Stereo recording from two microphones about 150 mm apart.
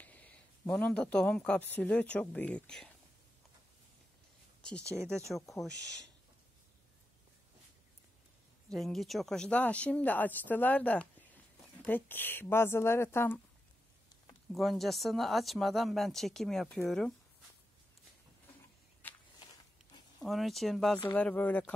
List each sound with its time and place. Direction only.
0.0 s speech: 10° left (ahead or behind)
4.8 s speech: 20° right (ahead or behind)
5.3 s speech: centre (ahead or behind)
5.7 s speech: 25° right (ahead or behind)
8.7 s speech: centre (ahead or behind)
14.5 s speech: centre (ahead or behind)
19.0 s walk: 15° left (ahead or behind)
19.4 s a sound: 25° left (ahead or behind)
20.2 s speech: centre (ahead or behind)